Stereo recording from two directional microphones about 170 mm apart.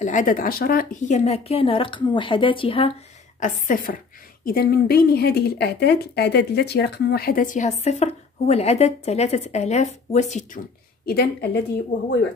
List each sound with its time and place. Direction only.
0.0 s a woman's voice: 50° left (ahead or behind); by 2.9 s 30° left (ahead or behind)
3.3 s speech: 45° left (ahead or behind)
11.1 s a woman's voice: 65° left (ahead or behind)